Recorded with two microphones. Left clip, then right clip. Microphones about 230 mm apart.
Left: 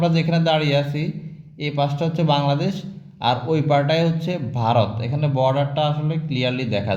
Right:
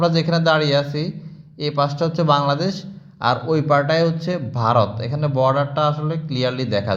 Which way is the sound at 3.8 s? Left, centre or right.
Right.